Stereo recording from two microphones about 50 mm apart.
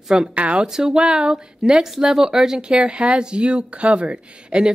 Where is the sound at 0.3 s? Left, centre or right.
Right.